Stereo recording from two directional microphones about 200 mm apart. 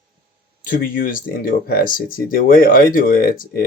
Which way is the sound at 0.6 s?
45° left (ahead or behind).